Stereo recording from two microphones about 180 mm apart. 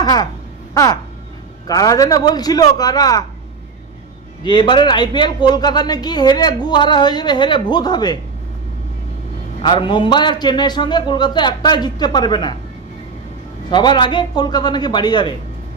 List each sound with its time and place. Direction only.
0.0 s speech: 20° left (ahead or behind)
4.4 s speech: 25° left (ahead or behind)
9.6 s speech: 25° left (ahead or behind)
13.7 s speech: 25° left (ahead or behind)